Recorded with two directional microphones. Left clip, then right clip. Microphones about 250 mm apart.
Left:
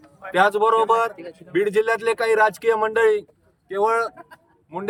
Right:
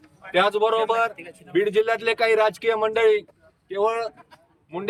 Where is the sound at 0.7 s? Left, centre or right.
Centre.